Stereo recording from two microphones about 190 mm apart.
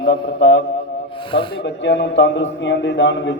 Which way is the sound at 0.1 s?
65° left (ahead or behind).